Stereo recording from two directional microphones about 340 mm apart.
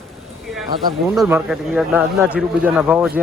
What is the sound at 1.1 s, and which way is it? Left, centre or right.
Speech, centre.